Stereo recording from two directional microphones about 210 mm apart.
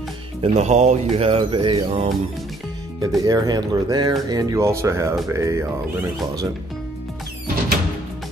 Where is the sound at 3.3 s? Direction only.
20° right (ahead or behind).